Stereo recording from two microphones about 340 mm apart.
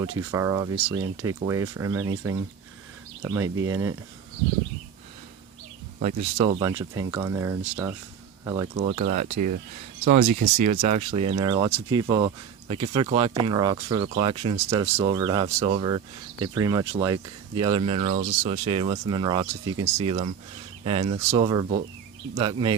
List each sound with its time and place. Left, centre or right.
0.3 s speech: centre
6.0 s speech: centre
9.3 s speech: right
10.0 s speech: right